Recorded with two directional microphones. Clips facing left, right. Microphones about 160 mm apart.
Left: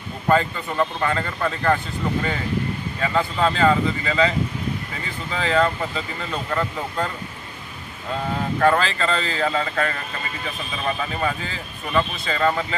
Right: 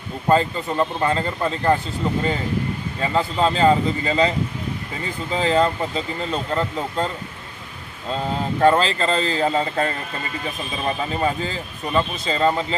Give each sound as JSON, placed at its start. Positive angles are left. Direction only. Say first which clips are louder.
{"t": 0.3, "sound": "speech", "louder": "right 2 dB", "side_deg": -30}
{"t": 3.0, "sound": "speech", "louder": "right 1 dB", "side_deg": -30}
{"t": 8.5, "sound": "speech", "louder": "right 3 dB", "side_deg": -25}